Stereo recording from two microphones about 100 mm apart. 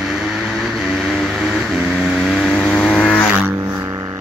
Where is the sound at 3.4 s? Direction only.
25° right (ahead or behind).